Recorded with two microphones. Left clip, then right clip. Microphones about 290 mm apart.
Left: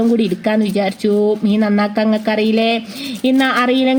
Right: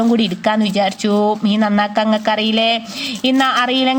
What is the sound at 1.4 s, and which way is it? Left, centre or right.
Speech, centre.